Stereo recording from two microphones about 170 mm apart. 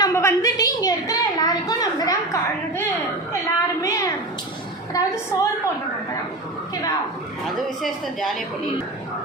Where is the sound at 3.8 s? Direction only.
20° left (ahead or behind).